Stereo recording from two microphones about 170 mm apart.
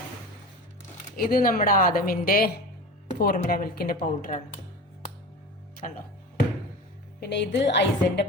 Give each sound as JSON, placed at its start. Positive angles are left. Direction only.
{"t": 1.1, "sound": "a woman's voice", "side_deg": 60}
{"t": 5.8, "sound": "speech", "side_deg": 50}
{"t": 7.2, "sound": "a woman's voice", "side_deg": 85}